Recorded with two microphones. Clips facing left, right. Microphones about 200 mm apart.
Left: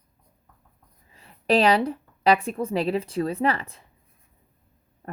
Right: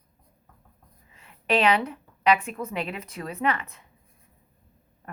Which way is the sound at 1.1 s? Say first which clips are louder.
Left 4 dB; 35° left (ahead or behind).